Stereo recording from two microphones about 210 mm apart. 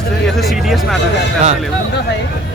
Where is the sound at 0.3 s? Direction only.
Centre (ahead or behind).